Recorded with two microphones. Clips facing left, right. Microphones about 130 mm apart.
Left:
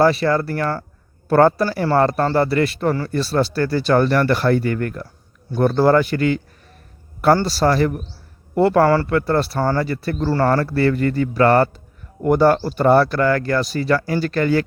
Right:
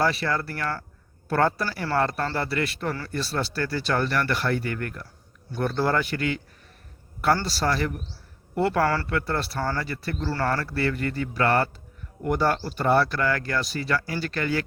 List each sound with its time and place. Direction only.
0.0 s speech: 35° left (ahead or behind)